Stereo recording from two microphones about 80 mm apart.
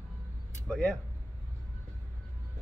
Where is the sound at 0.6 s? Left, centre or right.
Centre.